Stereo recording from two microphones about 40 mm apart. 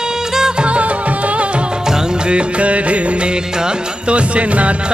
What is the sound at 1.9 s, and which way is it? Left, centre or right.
Music, right.